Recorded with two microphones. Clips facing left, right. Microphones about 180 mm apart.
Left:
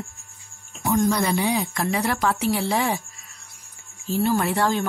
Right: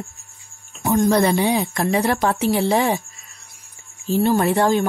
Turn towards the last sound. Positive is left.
turn(degrees=-20)  # may be behind; listen again after turning